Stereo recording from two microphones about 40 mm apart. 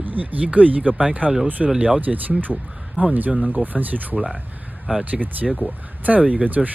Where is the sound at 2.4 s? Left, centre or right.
Right.